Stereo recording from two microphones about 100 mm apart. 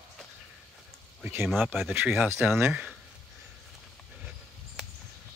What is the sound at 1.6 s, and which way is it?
Speech, centre (ahead or behind).